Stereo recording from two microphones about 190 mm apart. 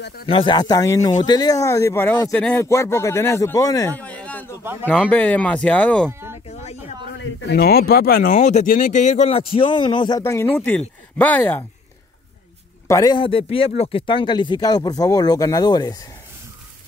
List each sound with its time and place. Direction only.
0.3 s speech: 25° left (ahead or behind); by 6.0 s 5° left (ahead or behind)
7.2 s speech: 70° left (ahead or behind); by 11.6 s 10° left (ahead or behind)
12.8 s speech: 20° left (ahead or behind)